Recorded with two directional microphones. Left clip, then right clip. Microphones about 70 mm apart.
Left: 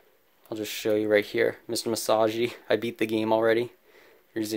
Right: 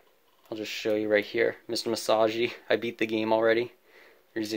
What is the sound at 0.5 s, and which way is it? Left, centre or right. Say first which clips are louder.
Speech: left 2 dB; left.